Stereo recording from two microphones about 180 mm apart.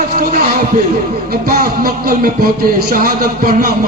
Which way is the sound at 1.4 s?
55° right (ahead or behind).